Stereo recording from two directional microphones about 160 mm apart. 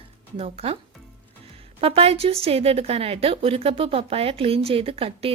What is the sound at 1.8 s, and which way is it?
A woman's voice, 35° right (ahead or behind).